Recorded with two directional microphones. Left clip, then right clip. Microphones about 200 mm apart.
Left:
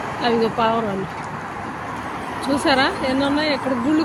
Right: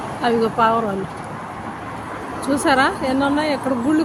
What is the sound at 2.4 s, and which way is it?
Speech, 5° right (ahead or behind).